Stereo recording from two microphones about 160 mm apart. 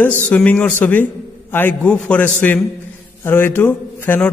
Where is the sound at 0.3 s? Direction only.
10° left (ahead or behind).